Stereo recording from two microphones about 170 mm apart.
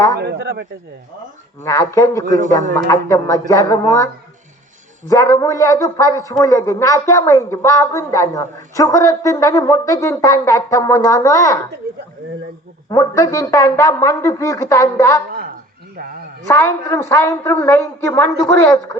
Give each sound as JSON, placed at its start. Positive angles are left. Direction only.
{"t": 0.2, "sound": "speech", "side_deg": -75}
{"t": 1.6, "sound": "speech", "side_deg": 15}
{"t": 2.4, "sound": "a man's voice", "side_deg": -45}
{"t": 2.7, "sound": "a woman's voice", "side_deg": 15}
{"t": 11.8, "sound": "a sound", "side_deg": -70}
{"t": 12.9, "sound": "speech", "side_deg": 20}
{"t": 16.5, "sound": "speech", "side_deg": 15}